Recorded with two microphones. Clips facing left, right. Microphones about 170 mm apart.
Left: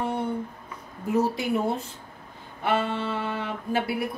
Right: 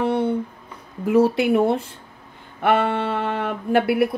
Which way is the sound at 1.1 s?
70° right (ahead or behind).